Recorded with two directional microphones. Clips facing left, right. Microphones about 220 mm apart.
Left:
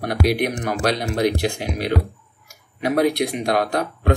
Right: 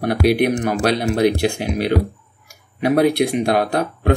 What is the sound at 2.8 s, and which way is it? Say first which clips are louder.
Speech: right 4 dB; 30° right (ahead or behind).